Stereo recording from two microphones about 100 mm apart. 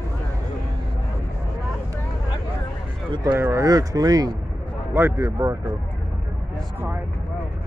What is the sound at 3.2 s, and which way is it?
Speech, 25° right (ahead or behind).